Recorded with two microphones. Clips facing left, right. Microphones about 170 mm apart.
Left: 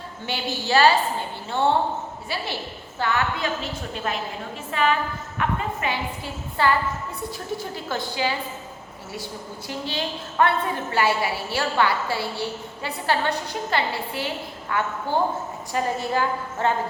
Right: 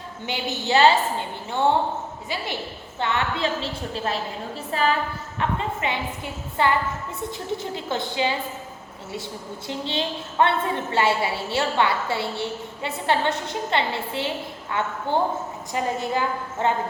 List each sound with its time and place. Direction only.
0.3 s a woman's voice: 20° right (ahead or behind)
3.0 s a woman's voice: 25° right (ahead or behind)
5.4 s a woman's voice: 25° right (ahead or behind)
9.6 s a woman's voice: 25° right (ahead or behind)